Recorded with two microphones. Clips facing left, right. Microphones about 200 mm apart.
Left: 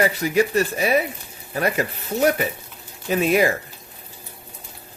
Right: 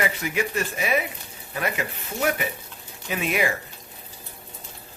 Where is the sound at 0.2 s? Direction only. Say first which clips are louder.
Left 7 dB; 35° left (ahead or behind).